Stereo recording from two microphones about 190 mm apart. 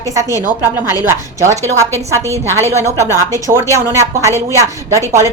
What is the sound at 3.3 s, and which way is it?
A woman's voice, 15° right (ahead or behind).